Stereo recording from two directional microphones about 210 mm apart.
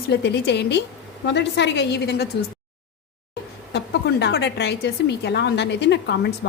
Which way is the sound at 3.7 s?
55° left (ahead or behind).